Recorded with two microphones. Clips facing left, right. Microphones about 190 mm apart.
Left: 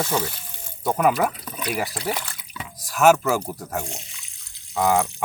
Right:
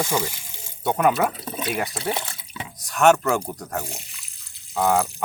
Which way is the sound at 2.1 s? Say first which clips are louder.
Right 2 dB; 25° right (ahead or behind).